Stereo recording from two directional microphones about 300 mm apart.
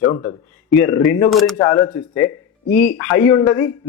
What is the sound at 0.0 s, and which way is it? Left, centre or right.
A man's voice, centre.